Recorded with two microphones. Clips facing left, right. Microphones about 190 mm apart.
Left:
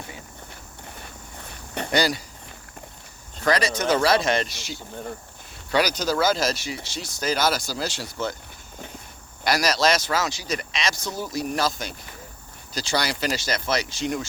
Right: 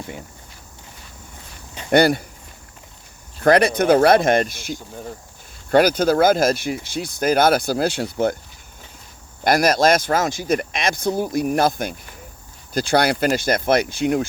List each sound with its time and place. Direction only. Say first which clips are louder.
1.9 s speech: right 8 dB; 55° right (ahead or behind)
3.4 s speech: right 8 dB; 55° right (ahead or behind)
9.4 s speech: right 6 dB; 50° right (ahead or behind)